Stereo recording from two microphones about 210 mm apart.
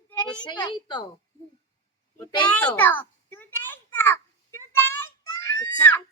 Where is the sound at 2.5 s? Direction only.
5° left (ahead or behind).